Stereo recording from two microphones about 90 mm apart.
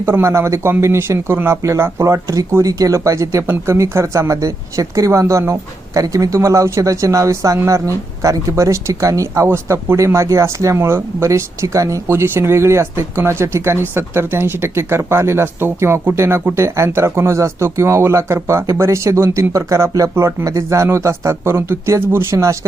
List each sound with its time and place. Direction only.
0.0 s speech: 30° right (ahead or behind)